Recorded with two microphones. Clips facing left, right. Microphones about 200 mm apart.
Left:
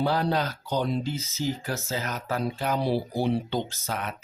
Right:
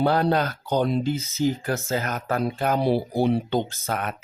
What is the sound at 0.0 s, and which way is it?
Speech, 55° right (ahead or behind).